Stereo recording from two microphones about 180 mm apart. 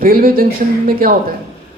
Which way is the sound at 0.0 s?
55° right (ahead or behind).